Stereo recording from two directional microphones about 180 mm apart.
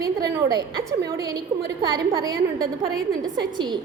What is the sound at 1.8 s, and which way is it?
Speech, 20° right (ahead or behind).